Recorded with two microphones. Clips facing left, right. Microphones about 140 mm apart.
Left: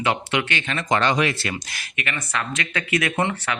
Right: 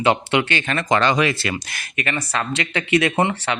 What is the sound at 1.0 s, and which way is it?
Speech, 90° right.